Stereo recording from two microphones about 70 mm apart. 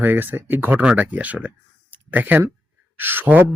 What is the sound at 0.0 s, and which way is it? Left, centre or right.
Speech, right.